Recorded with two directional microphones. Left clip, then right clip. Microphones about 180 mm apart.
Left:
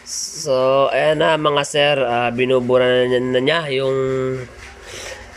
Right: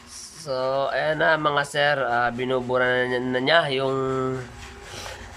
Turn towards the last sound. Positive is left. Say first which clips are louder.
# left 5 dB
turn(degrees=-5)  # may be behind; listen again after turning